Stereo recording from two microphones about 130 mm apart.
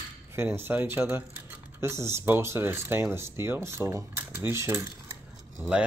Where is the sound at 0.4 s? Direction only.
15° right (ahead or behind).